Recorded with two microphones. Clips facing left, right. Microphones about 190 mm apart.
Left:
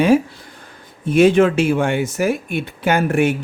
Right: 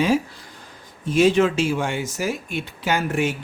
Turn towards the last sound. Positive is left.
turn(degrees=55)  # may be behind; listen again after turning